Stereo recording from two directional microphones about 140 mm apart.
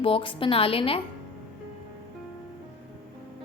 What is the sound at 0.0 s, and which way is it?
A woman's voice, 40° left (ahead or behind).